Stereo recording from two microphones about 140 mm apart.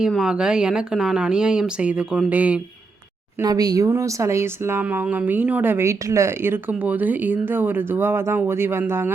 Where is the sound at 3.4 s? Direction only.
25° right (ahead or behind).